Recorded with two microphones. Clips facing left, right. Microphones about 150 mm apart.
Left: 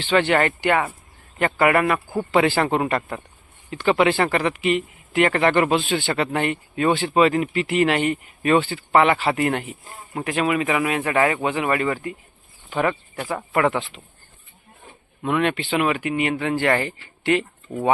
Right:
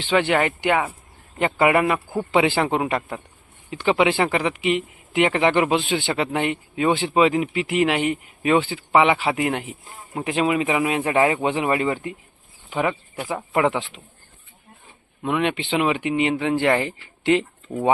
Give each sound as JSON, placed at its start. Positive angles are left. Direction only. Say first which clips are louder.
{"t": 0.0, "sound": "speech", "louder": "left 1 dB", "side_deg": -15}
{"t": 3.7, "sound": "speech", "louder": "left 1 dB", "side_deg": -15}
{"t": 10.2, "sound": "speech", "louder": "right 1 dB", "side_deg": -20}
{"t": 12.7, "sound": "speech", "louder": "left 1 dB", "side_deg": -15}
{"t": 15.2, "sound": "speech", "louder": "left 1 dB", "side_deg": -15}
{"t": 17.7, "sound": "speech", "louder": "right 1 dB", "side_deg": 5}